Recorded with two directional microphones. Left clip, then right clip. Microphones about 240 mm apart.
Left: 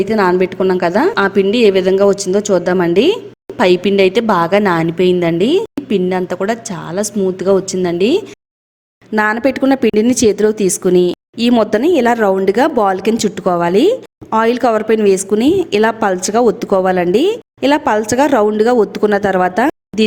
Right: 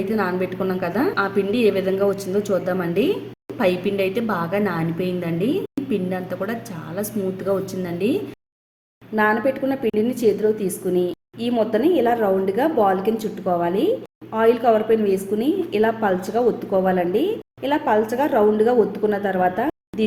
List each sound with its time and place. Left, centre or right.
0.0 s a woman's voice: left